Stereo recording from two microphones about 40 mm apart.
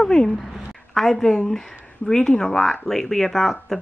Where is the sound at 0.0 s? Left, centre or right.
Centre.